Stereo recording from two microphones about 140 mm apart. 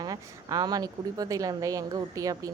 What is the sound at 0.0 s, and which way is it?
Speech, 25° right (ahead or behind).